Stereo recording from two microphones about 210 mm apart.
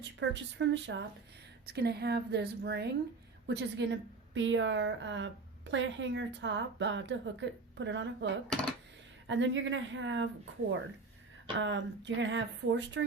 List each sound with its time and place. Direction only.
0.0 s a woman's voice: 60° right (ahead or behind)
11.5 s a woman's voice: 60° right (ahead or behind)